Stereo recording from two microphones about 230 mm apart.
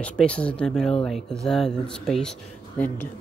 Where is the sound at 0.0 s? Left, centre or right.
Centre.